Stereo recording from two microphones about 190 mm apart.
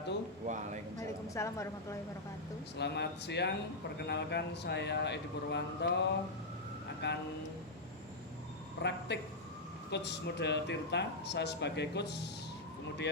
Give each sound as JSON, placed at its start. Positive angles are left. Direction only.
{"t": 0.4, "sound": "a man's voice", "side_deg": -40}
{"t": 0.9, "sound": "speech", "side_deg": 15}
{"t": 2.7, "sound": "a man's voice", "side_deg": 65}
{"t": 8.8, "sound": "a man's voice", "side_deg": 65}